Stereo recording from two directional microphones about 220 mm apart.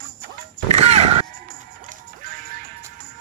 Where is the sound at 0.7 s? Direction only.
30° right (ahead or behind).